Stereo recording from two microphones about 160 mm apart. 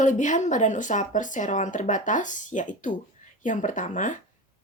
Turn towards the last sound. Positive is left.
turn(degrees=50)  # may be behind; listen again after turning